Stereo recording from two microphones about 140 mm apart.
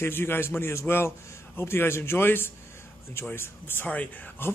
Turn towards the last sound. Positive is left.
turn(degrees=10)  # may be behind; listen again after turning